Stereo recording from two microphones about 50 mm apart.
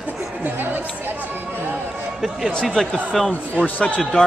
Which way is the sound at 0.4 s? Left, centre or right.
Right.